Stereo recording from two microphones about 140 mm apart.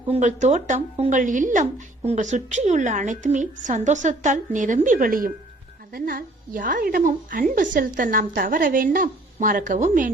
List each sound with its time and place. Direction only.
0.1 s a woman's voice: 60° right (ahead or behind)